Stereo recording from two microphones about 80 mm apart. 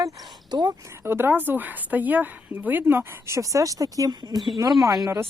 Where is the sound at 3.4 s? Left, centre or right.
Right.